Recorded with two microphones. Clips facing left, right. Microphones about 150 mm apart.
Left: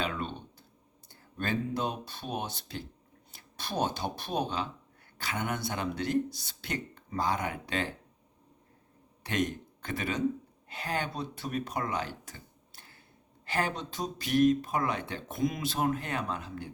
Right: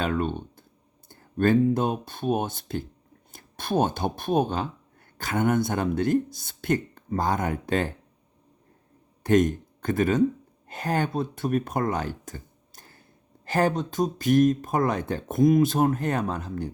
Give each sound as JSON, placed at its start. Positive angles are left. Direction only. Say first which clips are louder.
{"t": 0.0, "sound": "speech", "louder": "right 8 dB", "side_deg": -50}
{"t": 9.2, "sound": "speech", "louder": "right 11 dB", "side_deg": -45}